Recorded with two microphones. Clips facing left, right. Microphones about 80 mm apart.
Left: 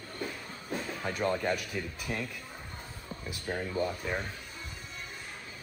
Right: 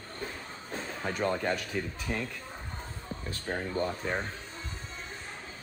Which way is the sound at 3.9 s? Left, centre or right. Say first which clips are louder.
Right 2 dB; right.